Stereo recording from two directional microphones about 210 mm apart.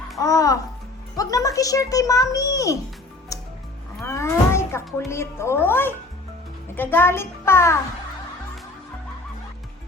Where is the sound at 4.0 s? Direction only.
15° left (ahead or behind).